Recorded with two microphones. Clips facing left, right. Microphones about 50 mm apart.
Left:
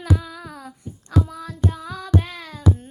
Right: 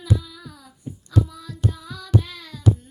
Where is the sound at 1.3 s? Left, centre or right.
Left.